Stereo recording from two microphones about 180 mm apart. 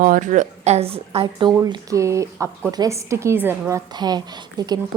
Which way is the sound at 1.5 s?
15° right (ahead or behind).